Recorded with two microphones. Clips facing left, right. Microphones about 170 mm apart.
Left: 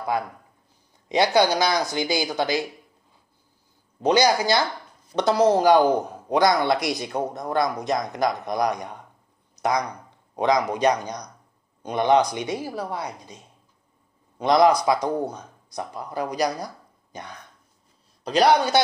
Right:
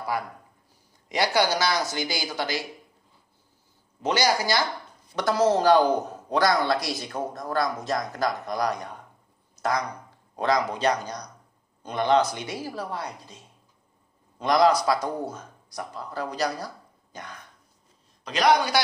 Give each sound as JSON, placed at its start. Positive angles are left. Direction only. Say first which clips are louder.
{"t": 1.0, "sound": "speech", "louder": "left 4 dB", "side_deg": 20}
{"t": 4.0, "sound": "a woman's voice", "louder": "left 5 dB", "side_deg": 15}
{"t": 14.4, "sound": "speech", "louder": "left 3 dB", "side_deg": 20}
{"t": 18.2, "sound": "a man's voice", "louder": "left 3 dB", "side_deg": 35}